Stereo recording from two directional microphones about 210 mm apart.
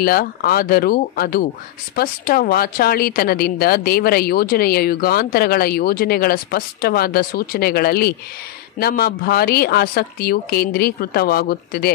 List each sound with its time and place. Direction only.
0.0 s a woman's voice: 45° left (ahead or behind)